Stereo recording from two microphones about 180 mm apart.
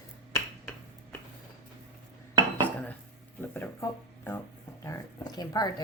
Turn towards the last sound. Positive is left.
turn(degrees=20)  # may be behind; listen again after turning